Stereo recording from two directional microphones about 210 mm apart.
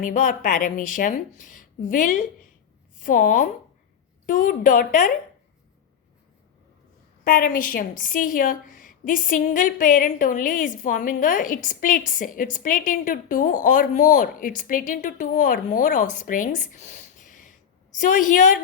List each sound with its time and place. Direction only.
0.0 s a woman's voice: 35° left (ahead or behind)
7.3 s a woman's voice: 45° left (ahead or behind)